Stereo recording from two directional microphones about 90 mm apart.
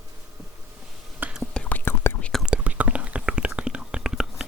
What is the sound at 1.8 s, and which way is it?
Whispering, 25° left (ahead or behind).